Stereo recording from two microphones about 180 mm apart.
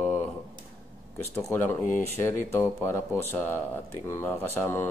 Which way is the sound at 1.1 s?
10° left (ahead or behind).